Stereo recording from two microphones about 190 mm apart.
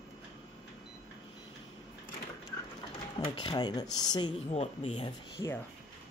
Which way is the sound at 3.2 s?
25° left (ahead or behind).